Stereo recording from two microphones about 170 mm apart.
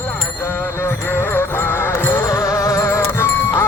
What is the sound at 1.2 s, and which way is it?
Music, 15° left (ahead or behind).